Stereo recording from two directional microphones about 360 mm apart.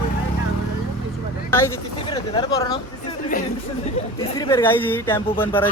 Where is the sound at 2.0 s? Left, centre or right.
Centre.